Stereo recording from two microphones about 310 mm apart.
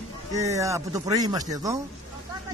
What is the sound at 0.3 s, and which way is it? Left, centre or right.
Speech, centre.